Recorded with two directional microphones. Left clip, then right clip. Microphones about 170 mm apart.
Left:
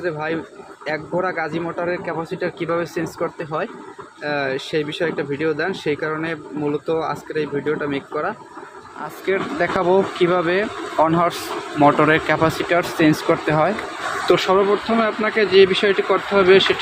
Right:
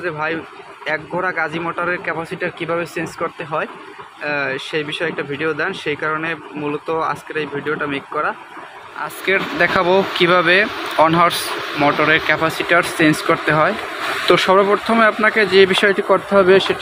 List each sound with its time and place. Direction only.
0.0 s speech: 15° left (ahead or behind)
11.8 s speech: 25° left (ahead or behind)
12.6 s speech: 5° left (ahead or behind)